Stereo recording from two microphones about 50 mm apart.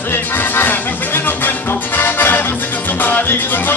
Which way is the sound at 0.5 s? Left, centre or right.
Left.